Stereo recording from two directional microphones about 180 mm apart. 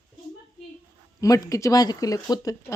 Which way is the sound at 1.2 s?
20° left (ahead or behind).